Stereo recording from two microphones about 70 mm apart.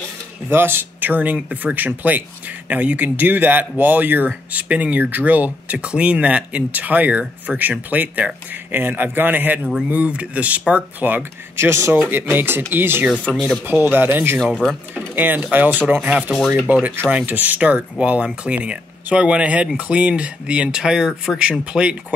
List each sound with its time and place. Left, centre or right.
0.5 s speech: right
11.5 s speech: right
13.1 s speech: centre
13.8 s speech: right
14.5 s speech: centre
15.0 s speech: right
16.3 s speech: centre
17.3 s speech: right